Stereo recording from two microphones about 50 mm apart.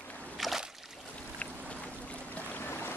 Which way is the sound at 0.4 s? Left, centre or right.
Centre.